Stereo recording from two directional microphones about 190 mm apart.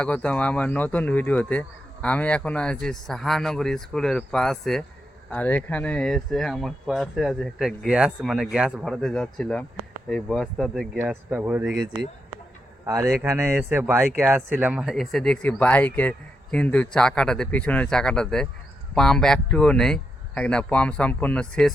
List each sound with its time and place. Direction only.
0.0 s speech: 5° left (ahead or behind)
12.8 s a man's voice: 15° right (ahead or behind); by 21.7 s 5° left (ahead or behind)